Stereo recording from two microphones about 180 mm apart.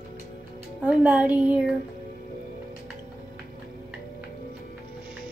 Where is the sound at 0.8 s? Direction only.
5° right (ahead or behind).